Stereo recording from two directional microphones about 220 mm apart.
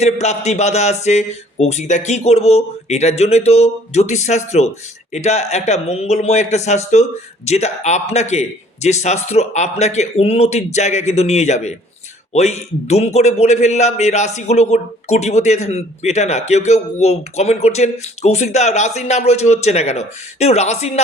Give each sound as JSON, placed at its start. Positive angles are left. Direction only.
{"t": 0.0, "sound": "a man's voice", "side_deg": 30}